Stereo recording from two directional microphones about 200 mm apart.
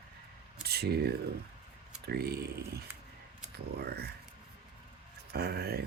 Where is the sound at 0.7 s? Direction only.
55° right (ahead or behind).